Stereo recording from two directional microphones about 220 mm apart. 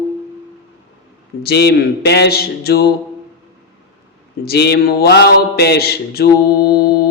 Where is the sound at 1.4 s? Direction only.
45° left (ahead or behind).